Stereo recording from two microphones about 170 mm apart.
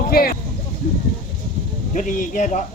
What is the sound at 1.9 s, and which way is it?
Speech, 50° left (ahead or behind).